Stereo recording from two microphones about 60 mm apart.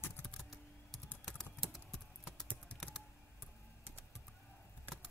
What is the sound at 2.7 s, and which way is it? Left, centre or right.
Typing, left.